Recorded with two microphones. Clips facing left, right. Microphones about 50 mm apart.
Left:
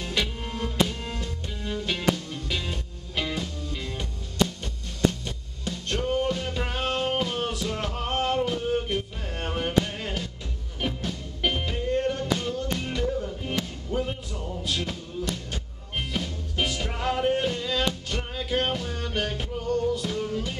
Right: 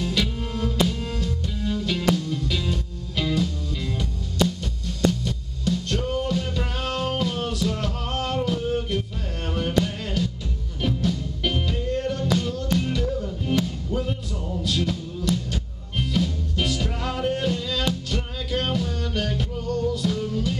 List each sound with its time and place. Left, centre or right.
0.0 s music: centre
5.2 s music: centre
14.3 s music: centre
14.6 s music: centre